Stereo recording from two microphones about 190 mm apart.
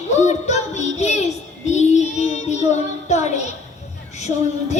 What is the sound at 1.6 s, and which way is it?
Child singing, 35° left (ahead or behind).